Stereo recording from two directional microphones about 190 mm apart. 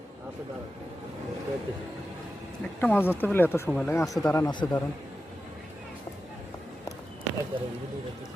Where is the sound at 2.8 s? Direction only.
10° left (ahead or behind).